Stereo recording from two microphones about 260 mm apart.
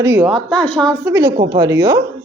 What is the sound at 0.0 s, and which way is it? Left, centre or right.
Speech, centre.